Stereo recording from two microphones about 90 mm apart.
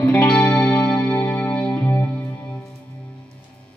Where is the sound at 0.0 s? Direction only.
15° left (ahead or behind).